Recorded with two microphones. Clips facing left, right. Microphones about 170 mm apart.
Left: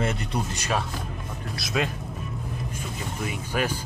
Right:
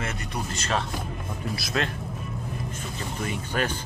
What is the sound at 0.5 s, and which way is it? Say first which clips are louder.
Speech: even; 15° left (ahead or behind).